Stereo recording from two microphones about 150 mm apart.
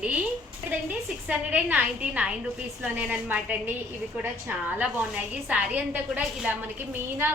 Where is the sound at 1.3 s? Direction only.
10° right (ahead or behind).